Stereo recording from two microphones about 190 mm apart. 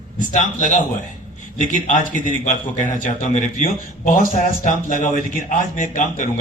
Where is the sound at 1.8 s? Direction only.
40° left (ahead or behind).